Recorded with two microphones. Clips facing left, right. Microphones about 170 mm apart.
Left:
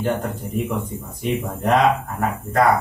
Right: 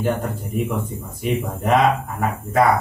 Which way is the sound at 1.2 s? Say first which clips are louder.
Even; centre (ahead or behind).